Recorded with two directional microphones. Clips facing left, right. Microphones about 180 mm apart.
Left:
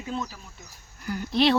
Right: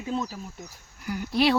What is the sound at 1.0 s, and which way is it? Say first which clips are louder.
Speech: left 1 dB; 10° right (ahead or behind).